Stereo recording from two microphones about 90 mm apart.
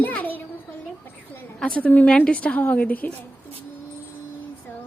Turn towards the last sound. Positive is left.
turn(degrees=20)  # may be behind; listen again after turning